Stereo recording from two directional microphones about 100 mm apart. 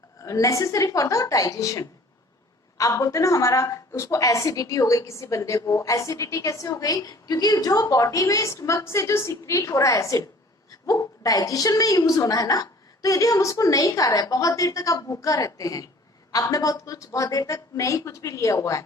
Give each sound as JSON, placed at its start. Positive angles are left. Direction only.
{"t": 0.2, "sound": "a woman's voice", "side_deg": 30}